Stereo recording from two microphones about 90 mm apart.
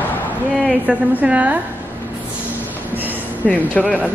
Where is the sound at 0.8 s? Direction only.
15° right (ahead or behind).